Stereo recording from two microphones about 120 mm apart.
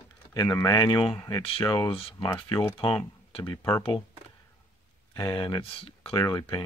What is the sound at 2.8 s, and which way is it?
Speech, 45° left (ahead or behind).